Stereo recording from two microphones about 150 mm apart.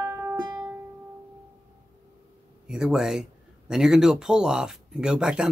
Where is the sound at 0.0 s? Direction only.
20° right (ahead or behind).